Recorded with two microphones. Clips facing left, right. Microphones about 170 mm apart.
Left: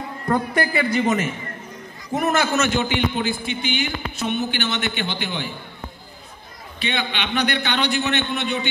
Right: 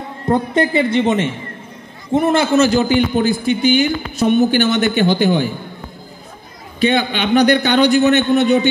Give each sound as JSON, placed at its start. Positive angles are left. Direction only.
{"t": 0.3, "sound": "a man's voice", "side_deg": -25}
{"t": 6.8, "sound": "a man's voice", "side_deg": -45}